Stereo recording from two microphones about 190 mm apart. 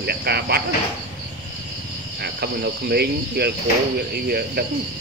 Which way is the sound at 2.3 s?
55° right (ahead or behind).